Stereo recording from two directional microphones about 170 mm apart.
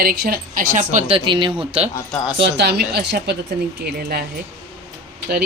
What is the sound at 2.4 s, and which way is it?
A woman's voice, 90° right.